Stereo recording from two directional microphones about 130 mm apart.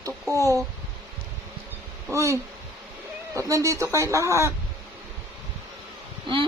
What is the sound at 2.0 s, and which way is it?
Speech, 25° right (ahead or behind).